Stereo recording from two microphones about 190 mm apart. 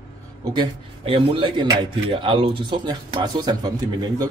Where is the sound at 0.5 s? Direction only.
25° right (ahead or behind).